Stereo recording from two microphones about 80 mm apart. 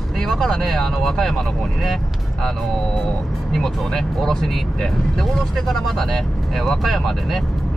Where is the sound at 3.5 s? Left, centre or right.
Centre.